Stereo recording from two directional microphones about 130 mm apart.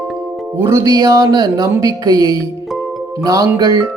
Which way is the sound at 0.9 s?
30° right (ahead or behind).